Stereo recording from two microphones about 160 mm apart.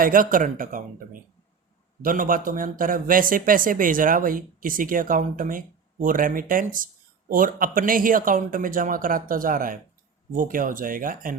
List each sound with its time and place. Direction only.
0.0 s speech: 60° right (ahead or behind)